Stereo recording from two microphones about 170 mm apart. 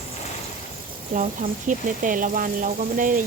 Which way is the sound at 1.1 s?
45° right (ahead or behind).